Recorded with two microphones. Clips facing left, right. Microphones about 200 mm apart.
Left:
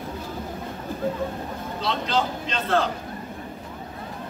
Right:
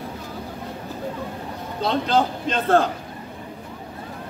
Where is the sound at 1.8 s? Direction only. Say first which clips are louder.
Right 5 dB; 50° right (ahead or behind).